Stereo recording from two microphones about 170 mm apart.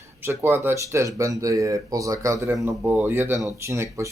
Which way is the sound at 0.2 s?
15° right (ahead or behind).